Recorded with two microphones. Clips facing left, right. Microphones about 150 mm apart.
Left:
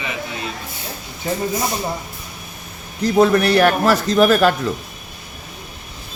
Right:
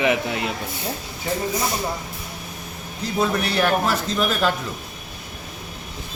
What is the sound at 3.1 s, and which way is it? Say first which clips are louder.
A man's voice: left 8 dB; 65° left (ahead or behind).